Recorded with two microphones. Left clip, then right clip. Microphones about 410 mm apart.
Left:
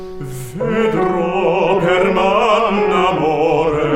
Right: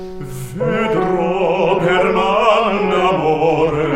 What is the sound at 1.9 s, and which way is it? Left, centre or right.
Music, left.